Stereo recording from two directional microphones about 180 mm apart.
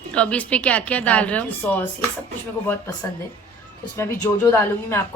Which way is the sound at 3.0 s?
15° left (ahead or behind).